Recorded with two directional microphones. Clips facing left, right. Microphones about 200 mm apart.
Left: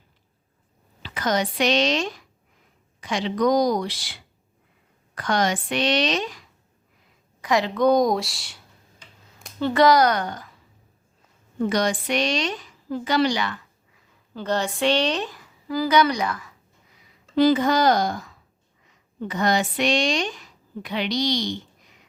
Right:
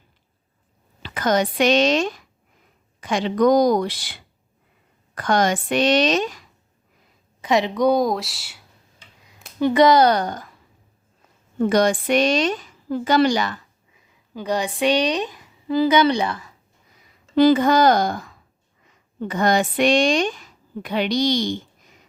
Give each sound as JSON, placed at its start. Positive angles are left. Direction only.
{"t": 1.0, "sound": "a woman's voice", "side_deg": -50}
{"t": 7.4, "sound": "a woman's voice", "side_deg": -20}
{"t": 9.6, "sound": "speech", "side_deg": -15}
{"t": 11.6, "sound": "a woman's voice", "side_deg": -50}
{"t": 13.9, "sound": "speech", "side_deg": -15}
{"t": 17.3, "sound": "a woman's voice", "side_deg": -60}